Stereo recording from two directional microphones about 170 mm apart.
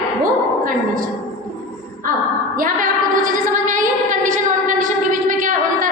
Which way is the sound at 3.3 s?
50° right (ahead or behind).